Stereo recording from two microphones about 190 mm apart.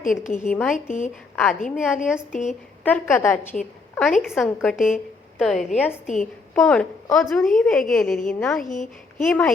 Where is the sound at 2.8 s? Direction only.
10° left (ahead or behind).